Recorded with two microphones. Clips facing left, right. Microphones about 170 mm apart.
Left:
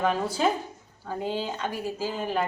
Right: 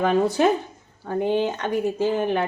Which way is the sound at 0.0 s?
65° right (ahead or behind).